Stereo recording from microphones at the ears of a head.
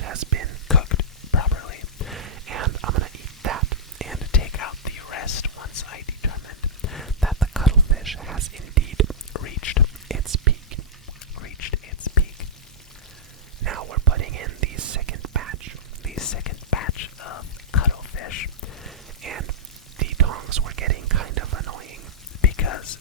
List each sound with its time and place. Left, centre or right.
0.0 s whispering: right
0.7 s whispering: left
2.2 s whispering: right
4.3 s whispering: left
7.3 s whispering: centre
8.4 s whispering: right
9.3 s whispering: left
10.2 s whispering: right
11.3 s whispering: left
13.6 s whispering: right
16.2 s whispering: left
19.2 s raindrop: right
20.0 s whispering: right
22.4 s whispering: left